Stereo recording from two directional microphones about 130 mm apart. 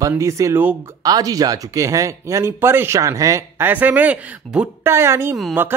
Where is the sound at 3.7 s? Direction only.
10° right (ahead or behind).